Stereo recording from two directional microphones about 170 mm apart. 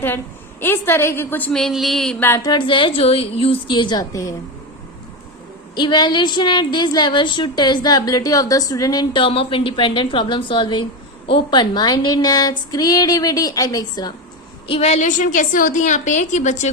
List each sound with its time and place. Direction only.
0.6 s a woman's voice: 15° left (ahead or behind)
2.5 s a woman's voice: 30° left (ahead or behind)
5.7 s a woman's voice: 25° left (ahead or behind)
14.7 s a woman's voice: 40° left (ahead or behind)